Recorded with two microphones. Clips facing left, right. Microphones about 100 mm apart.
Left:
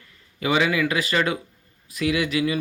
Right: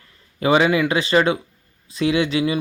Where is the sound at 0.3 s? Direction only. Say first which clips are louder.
Right 5 dB; 30° right (ahead or behind).